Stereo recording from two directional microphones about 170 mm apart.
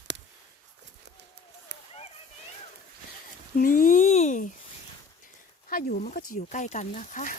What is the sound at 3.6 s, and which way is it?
Speech, 55° left (ahead or behind).